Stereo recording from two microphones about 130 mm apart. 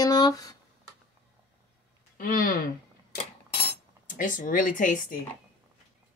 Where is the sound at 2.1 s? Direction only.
90° left.